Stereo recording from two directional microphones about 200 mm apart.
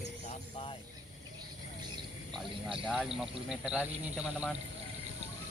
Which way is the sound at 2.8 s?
Centre (ahead or behind).